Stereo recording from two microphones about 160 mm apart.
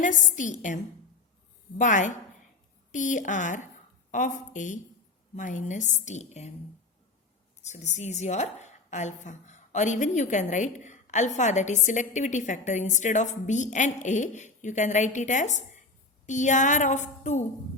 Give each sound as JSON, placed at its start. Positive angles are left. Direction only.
{"t": 0.0, "sound": "a woman's voice", "side_deg": 50}
{"t": 1.8, "sound": "a woman's voice", "side_deg": 50}
{"t": 7.6, "sound": "a woman's voice", "side_deg": 45}